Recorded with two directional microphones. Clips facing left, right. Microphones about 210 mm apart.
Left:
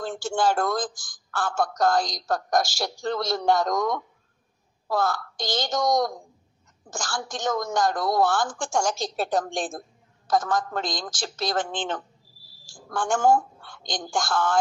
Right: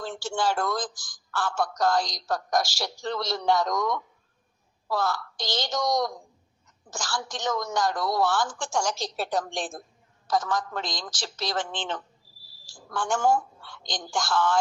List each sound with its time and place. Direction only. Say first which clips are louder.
0.0 s a woman's voice: left 4 dB; 50° left (ahead or behind)